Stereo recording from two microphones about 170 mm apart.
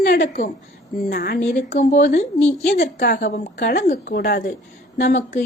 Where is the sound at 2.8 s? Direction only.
65° left (ahead or behind).